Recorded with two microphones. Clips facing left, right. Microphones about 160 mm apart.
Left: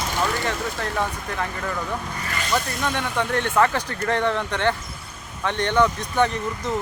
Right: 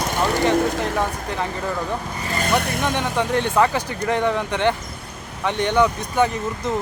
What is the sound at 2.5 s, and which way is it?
Speech, 60° right (ahead or behind).